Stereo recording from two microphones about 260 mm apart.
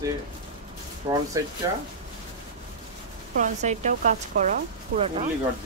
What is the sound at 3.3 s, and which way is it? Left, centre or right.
Speech, right.